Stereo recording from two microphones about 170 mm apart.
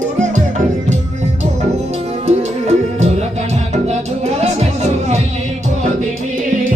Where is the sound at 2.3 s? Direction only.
40° right (ahead or behind).